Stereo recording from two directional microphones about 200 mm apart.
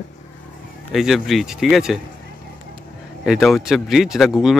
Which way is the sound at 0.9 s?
Centre (ahead or behind).